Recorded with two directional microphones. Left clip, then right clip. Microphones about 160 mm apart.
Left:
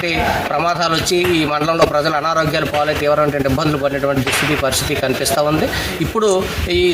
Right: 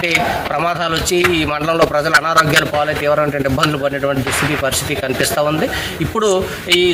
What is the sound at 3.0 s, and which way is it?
Speech, 5° right (ahead or behind).